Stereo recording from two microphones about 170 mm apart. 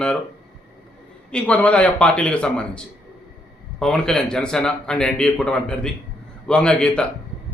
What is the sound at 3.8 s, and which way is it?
A man's voice, 5° left (ahead or behind).